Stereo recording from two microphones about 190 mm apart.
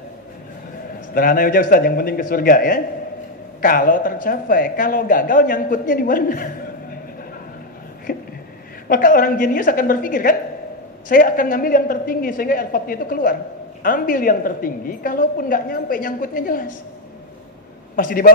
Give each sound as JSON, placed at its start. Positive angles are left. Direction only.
{"t": 1.1, "sound": "speech", "side_deg": 45}
{"t": 8.1, "sound": "a sound", "side_deg": 50}
{"t": 8.8, "sound": "speech", "side_deg": 45}
{"t": 17.9, "sound": "speech", "side_deg": 45}